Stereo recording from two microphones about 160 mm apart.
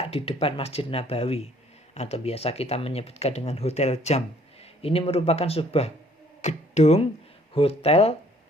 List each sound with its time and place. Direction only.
0.0 s speech: 40° left (ahead or behind)